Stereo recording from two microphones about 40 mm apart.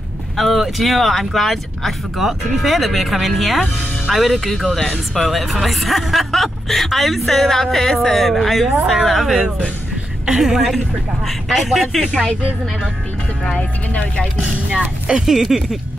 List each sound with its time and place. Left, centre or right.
0.4 s speech: centre
2.1 s speech: centre
10.2 s speech: centre
12.1 s speech: left
13.6 s speech: left
15.0 s speech: centre